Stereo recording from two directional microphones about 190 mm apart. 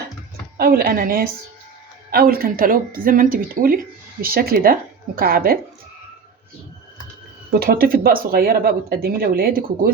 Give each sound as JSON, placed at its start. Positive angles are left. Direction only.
{"t": 0.5, "sound": "speech", "side_deg": -50}
{"t": 7.6, "sound": "speech", "side_deg": -50}